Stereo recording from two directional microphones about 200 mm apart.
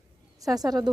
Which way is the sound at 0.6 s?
20° right (ahead or behind).